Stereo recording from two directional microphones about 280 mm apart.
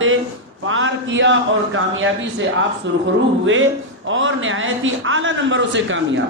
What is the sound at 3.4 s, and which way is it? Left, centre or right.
A man's voice, right.